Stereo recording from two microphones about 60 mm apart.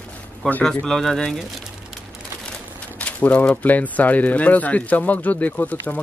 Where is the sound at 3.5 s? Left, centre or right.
Left.